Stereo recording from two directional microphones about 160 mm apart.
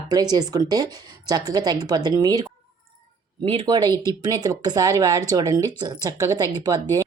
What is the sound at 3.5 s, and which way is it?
Speech, 35° right (ahead or behind).